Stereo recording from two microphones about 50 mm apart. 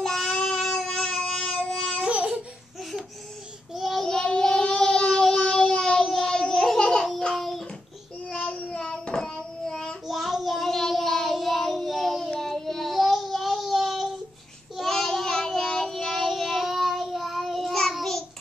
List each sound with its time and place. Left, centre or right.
0.0 s a sound: centre
2.0 s babbling: right
3.7 s child singing: centre
5.4 s a sound: centre
8.3 s child singing: left
10.0 s child singing: centre